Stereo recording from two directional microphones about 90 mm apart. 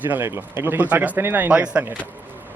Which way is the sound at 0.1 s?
30° right (ahead or behind).